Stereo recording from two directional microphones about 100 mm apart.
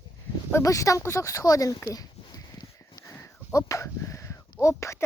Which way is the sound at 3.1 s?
30° left (ahead or behind).